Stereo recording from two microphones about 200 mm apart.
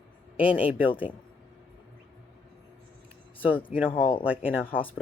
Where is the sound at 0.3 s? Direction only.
5° right (ahead or behind).